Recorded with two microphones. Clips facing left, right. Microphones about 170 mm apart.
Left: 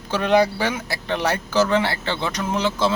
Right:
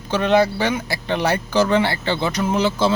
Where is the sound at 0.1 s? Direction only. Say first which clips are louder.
Right 1 dB; 10° left (ahead or behind).